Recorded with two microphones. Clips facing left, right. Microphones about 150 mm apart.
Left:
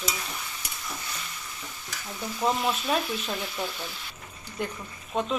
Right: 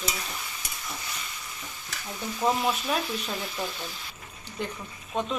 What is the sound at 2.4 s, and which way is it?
Speech, 5° right (ahead or behind).